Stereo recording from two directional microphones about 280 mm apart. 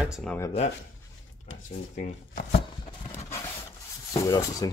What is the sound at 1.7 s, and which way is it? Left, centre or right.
Speech, left.